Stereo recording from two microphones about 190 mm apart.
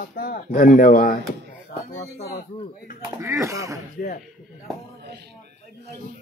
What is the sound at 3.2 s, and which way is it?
Speech, 15° right (ahead or behind).